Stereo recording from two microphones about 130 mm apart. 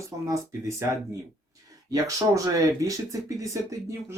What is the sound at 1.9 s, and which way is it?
Speech, 25° right (ahead or behind).